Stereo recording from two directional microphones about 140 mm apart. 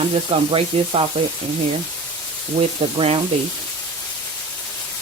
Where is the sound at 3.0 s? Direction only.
45° right (ahead or behind).